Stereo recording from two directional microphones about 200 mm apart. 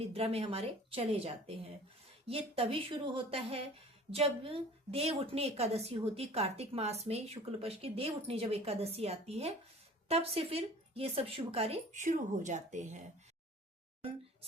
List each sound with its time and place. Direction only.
0.0 s a woman's voice: 30° right (ahead or behind)